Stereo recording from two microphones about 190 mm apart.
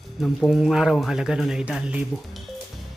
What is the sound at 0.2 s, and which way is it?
Speech, centre (ahead or behind).